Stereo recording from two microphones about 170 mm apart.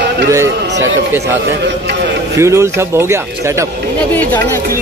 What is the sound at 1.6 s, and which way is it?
Speech, 80° right.